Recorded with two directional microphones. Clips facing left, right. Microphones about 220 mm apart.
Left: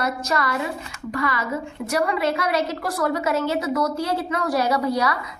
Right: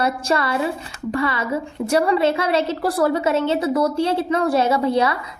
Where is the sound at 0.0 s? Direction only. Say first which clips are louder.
Right 4 dB; 30° right (ahead or behind).